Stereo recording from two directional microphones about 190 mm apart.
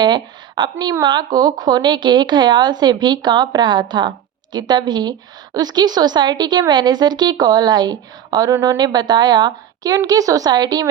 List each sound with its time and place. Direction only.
0.0 s a woman's voice: 25° right (ahead or behind)